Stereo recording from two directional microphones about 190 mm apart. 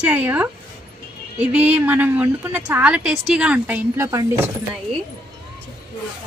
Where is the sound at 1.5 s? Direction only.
10° right (ahead or behind).